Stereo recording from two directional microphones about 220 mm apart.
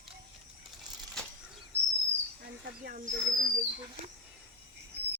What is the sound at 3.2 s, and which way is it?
Speech, 5° right (ahead or behind).